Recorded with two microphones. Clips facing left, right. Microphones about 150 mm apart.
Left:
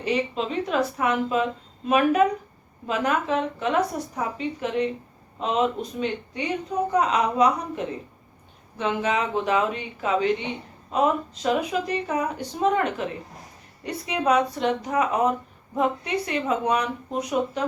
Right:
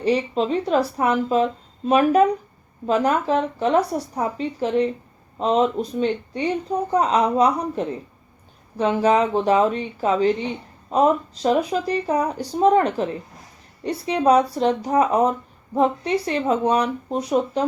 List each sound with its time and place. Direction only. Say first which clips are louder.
0.0 s speech: right 5 dB; 35° right (ahead or behind)